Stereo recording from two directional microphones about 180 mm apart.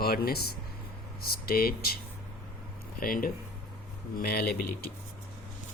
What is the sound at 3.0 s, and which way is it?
A man's voice, 50° left (ahead or behind).